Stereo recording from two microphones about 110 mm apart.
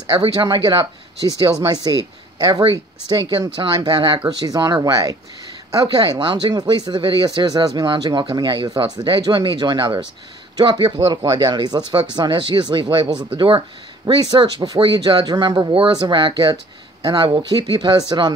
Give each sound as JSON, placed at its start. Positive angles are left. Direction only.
{"t": 0.5, "sound": "speech", "side_deg": -40}